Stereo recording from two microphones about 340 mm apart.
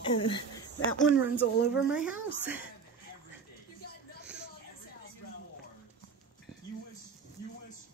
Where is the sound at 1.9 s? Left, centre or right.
Centre.